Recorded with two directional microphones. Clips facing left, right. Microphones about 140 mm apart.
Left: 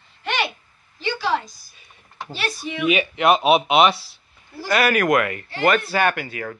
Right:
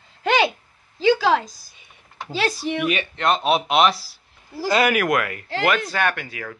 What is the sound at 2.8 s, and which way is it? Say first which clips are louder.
Speech: left 6 dB; 5° left (ahead or behind).